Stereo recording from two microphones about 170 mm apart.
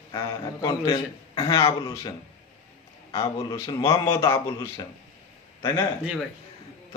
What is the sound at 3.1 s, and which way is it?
A man's voice, 20° left (ahead or behind).